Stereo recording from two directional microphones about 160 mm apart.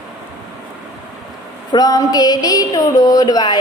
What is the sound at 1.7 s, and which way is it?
Speech, 25° left (ahead or behind).